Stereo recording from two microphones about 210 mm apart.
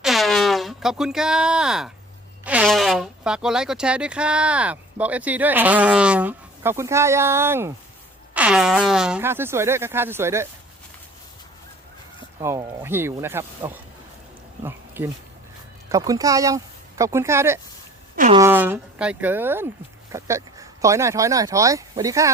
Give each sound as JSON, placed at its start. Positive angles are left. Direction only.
{"t": 0.0, "sound": "fart", "side_deg": 0}
{"t": 2.4, "sound": "speech", "side_deg": -5}
{"t": 12.4, "sound": "speech", "side_deg": -15}
{"t": 14.6, "sound": "a sound", "side_deg": -10}
{"t": 15.9, "sound": "speech", "side_deg": -15}